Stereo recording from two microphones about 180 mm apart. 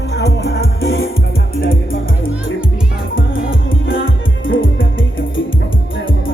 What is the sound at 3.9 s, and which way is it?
Music, 90° left.